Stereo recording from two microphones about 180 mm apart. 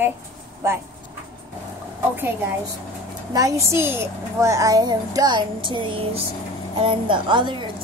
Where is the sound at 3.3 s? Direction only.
20° right (ahead or behind).